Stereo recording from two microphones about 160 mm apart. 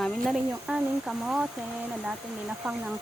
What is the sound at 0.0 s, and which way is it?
Speech, centre (ahead or behind).